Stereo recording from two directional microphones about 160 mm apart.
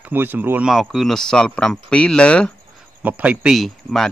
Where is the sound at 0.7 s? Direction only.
Centre (ahead or behind).